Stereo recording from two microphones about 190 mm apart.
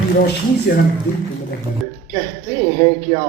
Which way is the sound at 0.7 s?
50° left (ahead or behind).